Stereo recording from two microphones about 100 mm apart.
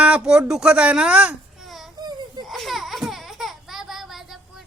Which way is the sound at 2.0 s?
45° right (ahead or behind).